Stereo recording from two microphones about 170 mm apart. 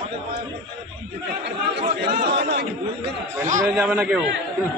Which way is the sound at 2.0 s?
70° right (ahead or behind).